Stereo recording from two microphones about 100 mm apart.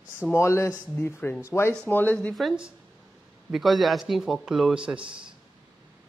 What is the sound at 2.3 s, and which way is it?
Speech, 5° right (ahead or behind).